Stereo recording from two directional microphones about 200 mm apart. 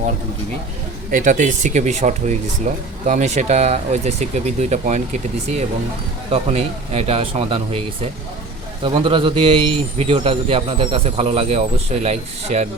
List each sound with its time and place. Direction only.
1.1 s speech: 40° right (ahead or behind)
6.3 s speech: 30° right (ahead or behind)
8.8 s speech: 25° right (ahead or behind)